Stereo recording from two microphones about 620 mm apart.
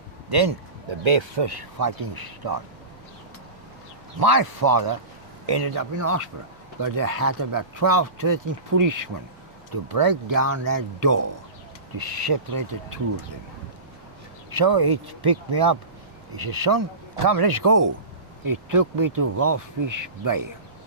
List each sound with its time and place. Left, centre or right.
0.3 s speech: right
4.2 s speech: right
14.5 s speech: right